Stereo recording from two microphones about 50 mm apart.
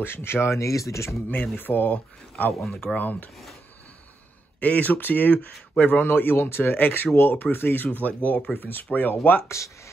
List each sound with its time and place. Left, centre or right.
0.0 s speech: left
1.3 s speech: left
4.6 s speech: left